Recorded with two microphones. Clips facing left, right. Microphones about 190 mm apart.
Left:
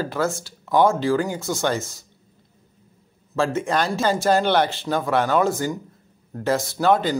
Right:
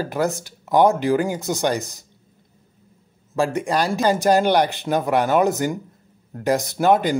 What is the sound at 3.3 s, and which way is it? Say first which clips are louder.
Speech: right 1 dB; 15° right (ahead or behind).